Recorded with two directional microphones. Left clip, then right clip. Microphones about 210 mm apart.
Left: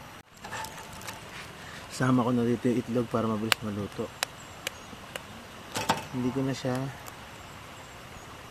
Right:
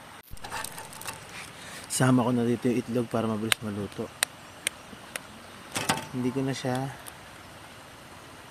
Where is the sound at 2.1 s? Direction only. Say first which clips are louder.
Right 1 dB; 20° right (ahead or behind).